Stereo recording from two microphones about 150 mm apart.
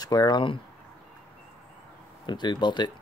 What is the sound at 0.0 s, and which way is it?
Speech, 25° left (ahead or behind).